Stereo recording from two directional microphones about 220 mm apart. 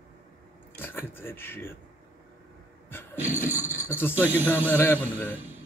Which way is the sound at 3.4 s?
35° left (ahead or behind).